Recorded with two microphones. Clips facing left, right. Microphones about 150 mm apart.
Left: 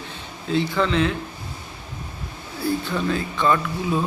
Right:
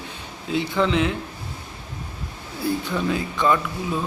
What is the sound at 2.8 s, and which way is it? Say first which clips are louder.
Speech: even; 15° right (ahead or behind).